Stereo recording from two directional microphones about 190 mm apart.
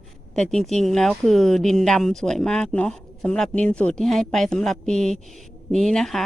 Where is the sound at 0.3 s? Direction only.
Centre (ahead or behind).